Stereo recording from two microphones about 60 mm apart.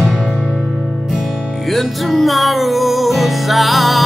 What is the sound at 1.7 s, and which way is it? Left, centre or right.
Music, centre.